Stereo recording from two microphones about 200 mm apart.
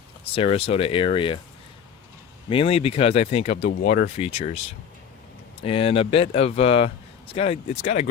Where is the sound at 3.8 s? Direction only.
45° left (ahead or behind).